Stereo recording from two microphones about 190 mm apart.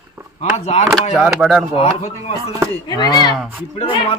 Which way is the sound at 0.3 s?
35° left (ahead or behind).